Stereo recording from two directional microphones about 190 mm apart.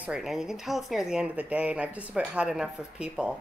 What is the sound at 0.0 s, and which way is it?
Speech, 5° right (ahead or behind).